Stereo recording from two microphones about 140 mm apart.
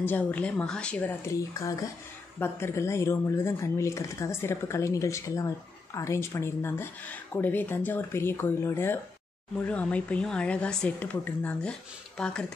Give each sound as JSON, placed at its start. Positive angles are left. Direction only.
{"t": 0.0, "sound": "speech", "side_deg": 10}
{"t": 1.5, "sound": "speech", "side_deg": 25}